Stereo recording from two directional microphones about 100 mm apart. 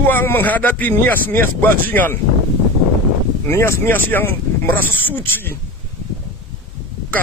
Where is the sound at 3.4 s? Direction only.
25° left (ahead or behind).